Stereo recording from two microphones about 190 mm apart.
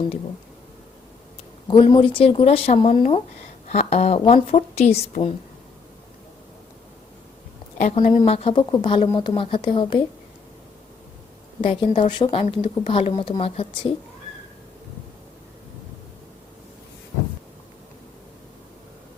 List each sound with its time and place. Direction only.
1.6 s a woman's voice: 25° left (ahead or behind)
8.1 s speech: 30° left (ahead or behind)
11.6 s speech: 25° left (ahead or behind)